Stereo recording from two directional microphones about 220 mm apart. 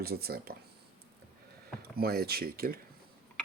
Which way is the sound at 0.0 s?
45° right (ahead or behind).